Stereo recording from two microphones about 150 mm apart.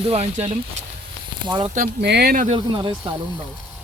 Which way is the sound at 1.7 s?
75° right (ahead or behind).